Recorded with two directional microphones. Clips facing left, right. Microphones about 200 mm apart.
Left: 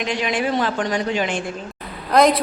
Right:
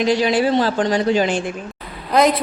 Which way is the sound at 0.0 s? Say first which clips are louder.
Right 6 dB; 35° right (ahead or behind).